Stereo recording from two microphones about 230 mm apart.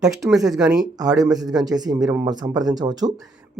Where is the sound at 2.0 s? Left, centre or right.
Centre.